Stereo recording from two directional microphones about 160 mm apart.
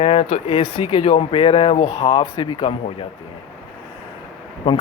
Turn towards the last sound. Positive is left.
turn(degrees=35)  # may be behind; listen again after turning